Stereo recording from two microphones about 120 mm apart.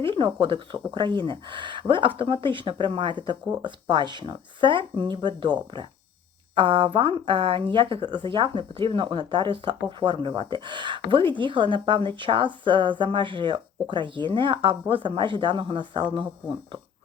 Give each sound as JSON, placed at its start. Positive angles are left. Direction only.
{"t": 0.0, "sound": "speech", "side_deg": -45}